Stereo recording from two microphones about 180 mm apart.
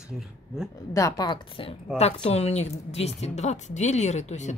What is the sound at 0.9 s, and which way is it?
Speech, 20° left (ahead or behind).